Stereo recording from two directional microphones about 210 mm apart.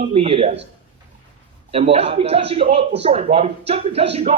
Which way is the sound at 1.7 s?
25° right (ahead or behind).